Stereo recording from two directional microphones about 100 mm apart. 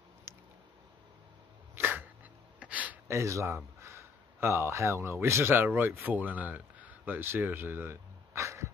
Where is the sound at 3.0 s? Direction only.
30° right (ahead or behind).